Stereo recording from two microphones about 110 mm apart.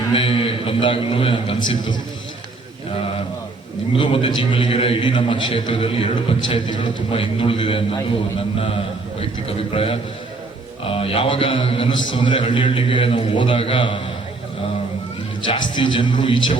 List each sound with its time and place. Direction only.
0.1 s a man's voice: 55° left (ahead or behind)
3.9 s a man's voice: 55° left (ahead or behind)
15.4 s a man's voice: 45° left (ahead or behind)